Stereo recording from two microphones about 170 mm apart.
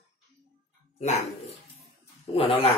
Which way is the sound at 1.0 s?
40° left (ahead or behind).